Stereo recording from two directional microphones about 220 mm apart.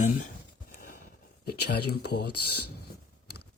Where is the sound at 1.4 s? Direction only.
45° left (ahead or behind).